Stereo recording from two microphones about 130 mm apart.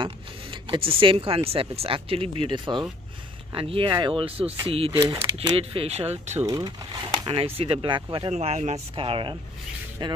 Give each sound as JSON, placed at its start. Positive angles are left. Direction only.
{"t": 0.0, "sound": "zipper", "side_deg": -40}
{"t": 1.5, "sound": "speech", "side_deg": -45}
{"t": 4.9, "sound": "speech", "side_deg": -25}
{"t": 5.4, "sound": "speech", "side_deg": -45}
{"t": 6.4, "sound": "speech", "side_deg": -30}
{"t": 8.3, "sound": "speech", "side_deg": -55}
{"t": 8.9, "sound": "speech", "side_deg": -45}